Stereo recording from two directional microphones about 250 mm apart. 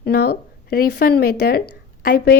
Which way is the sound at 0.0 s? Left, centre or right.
Left.